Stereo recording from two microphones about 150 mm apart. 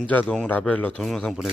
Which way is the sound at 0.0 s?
10° left (ahead or behind).